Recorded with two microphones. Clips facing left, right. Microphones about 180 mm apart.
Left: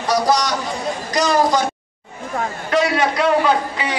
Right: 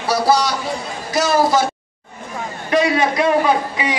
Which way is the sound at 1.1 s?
5° right (ahead or behind).